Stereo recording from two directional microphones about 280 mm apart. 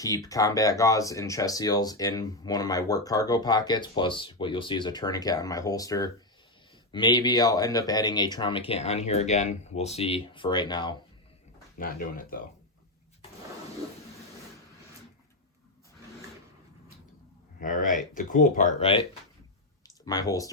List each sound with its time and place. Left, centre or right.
0.0 s speech: centre
11.8 s speech: left
17.6 s speech: left
20.1 s speech: centre